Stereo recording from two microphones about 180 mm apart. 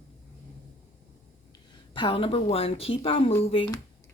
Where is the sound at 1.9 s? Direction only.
30° left (ahead or behind).